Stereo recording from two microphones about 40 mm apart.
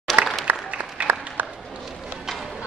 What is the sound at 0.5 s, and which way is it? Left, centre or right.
Applause, right.